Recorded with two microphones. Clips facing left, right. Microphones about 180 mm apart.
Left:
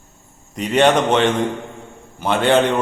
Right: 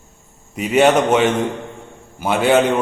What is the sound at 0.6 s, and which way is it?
A man's voice, 5° right (ahead or behind).